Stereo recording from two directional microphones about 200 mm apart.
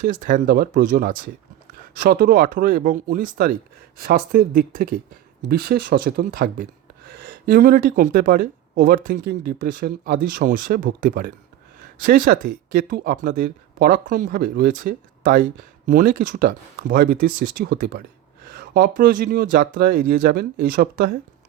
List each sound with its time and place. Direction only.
0.0 s speech: 40° right (ahead or behind)